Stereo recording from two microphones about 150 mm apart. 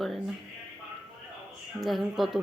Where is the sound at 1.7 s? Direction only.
Centre (ahead or behind).